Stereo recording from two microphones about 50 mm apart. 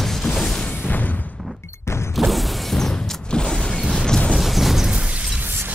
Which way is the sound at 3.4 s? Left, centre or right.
Centre.